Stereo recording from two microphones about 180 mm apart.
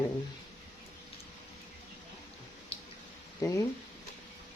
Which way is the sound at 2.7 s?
30° left (ahead or behind).